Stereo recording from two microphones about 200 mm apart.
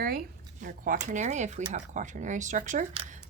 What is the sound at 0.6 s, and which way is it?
Speech, 40° right (ahead or behind).